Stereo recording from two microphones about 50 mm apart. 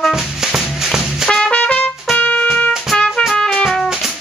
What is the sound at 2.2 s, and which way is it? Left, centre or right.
Music, left.